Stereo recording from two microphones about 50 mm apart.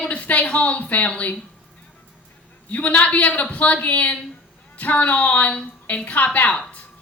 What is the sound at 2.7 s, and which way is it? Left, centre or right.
A man's voice, left.